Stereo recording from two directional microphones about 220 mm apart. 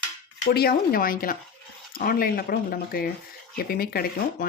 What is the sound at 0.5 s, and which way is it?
Speech, 45° left (ahead or behind).